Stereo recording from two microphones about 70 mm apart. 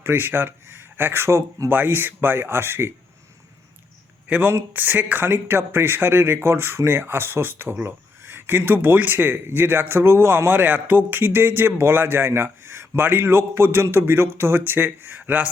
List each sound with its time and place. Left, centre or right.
0.0 s speech: right
1.7 s speech: right
4.3 s speech: right
10.5 s speech: right